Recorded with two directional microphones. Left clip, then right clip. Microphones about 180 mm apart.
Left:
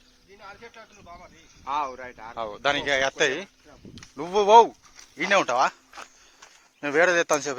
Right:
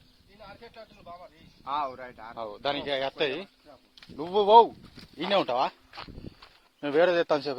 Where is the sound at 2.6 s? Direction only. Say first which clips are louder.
Left 6 dB; centre (ahead or behind).